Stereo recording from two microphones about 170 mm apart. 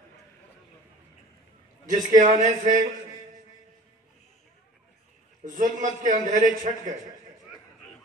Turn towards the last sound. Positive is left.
turn(degrees=-50)  # may be behind; listen again after turning